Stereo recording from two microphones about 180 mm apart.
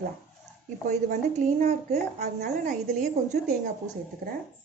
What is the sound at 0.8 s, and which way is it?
A woman's voice, 40° right (ahead or behind).